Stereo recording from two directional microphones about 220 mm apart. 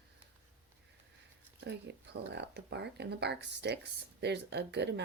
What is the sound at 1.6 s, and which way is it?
Speech, 50° right (ahead or behind).